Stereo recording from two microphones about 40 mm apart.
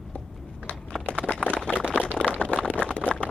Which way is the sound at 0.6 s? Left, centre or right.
Left.